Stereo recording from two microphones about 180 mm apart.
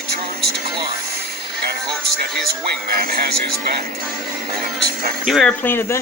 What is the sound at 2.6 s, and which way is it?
Speech, 60° right (ahead or behind).